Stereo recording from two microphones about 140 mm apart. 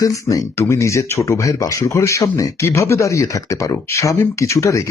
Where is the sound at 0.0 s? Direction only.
25° left (ahead or behind).